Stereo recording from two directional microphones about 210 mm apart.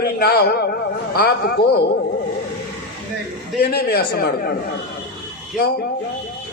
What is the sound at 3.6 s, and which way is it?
Speech, 50° left (ahead or behind).